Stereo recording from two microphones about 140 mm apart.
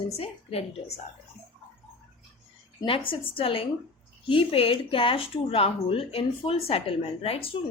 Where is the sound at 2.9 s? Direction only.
40° left (ahead or behind).